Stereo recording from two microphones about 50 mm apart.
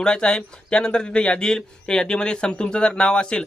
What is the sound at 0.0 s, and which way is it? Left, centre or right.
Speech, centre.